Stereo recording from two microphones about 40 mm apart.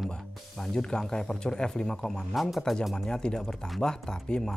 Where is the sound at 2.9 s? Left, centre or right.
Centre.